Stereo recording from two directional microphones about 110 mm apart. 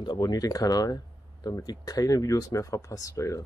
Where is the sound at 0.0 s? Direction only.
40° left (ahead or behind).